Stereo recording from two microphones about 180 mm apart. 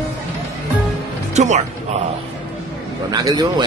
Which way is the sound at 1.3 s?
40° right (ahead or behind).